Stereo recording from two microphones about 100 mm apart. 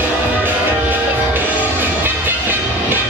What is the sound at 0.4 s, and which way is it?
Music, 20° right (ahead or behind).